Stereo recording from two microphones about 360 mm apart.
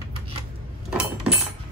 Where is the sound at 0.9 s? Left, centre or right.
Centre.